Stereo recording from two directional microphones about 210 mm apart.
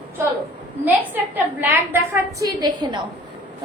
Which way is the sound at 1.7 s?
10° right (ahead or behind).